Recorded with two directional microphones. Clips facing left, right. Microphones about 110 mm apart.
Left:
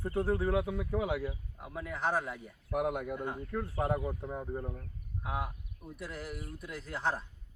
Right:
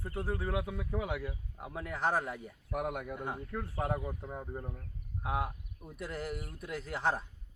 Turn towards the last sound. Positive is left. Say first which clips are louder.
# right 1 dB
turn(degrees=-5)  # may be behind; listen again after turning